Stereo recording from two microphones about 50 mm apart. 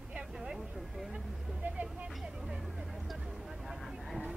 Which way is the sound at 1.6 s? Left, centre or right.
Right.